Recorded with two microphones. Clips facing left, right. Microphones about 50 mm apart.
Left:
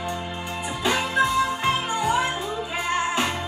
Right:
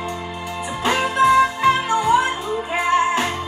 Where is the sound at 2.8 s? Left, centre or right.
Right.